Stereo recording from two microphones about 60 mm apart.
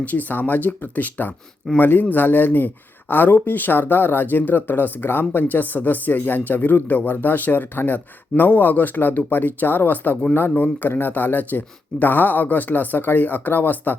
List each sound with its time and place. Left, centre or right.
0.0 s speech: left